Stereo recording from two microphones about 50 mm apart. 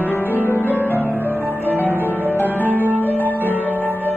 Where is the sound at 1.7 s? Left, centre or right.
Left.